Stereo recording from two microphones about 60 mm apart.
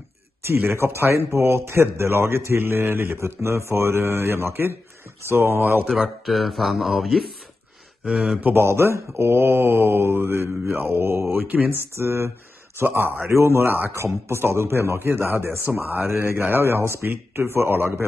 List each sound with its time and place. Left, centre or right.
0.5 s a man's voice: right
3.2 s a man's voice: right
5.9 s speech: centre
8.0 s speech: centre
8.5 s speech: right
11.9 s a man's voice: right
13.3 s a man's voice: right